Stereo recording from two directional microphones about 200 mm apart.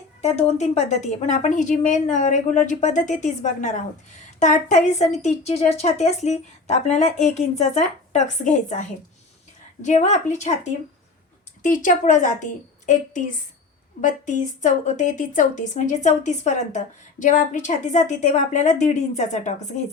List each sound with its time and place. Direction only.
0.2 s a woman's voice: 35° left (ahead or behind)